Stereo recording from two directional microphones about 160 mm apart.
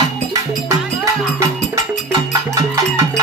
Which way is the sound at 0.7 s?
20° right (ahead or behind).